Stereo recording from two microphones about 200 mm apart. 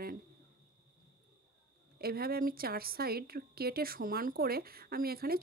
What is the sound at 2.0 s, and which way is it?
Speech, 50° right (ahead or behind).